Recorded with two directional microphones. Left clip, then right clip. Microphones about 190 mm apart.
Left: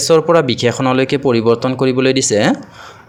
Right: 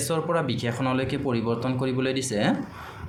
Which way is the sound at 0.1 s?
50° left (ahead or behind).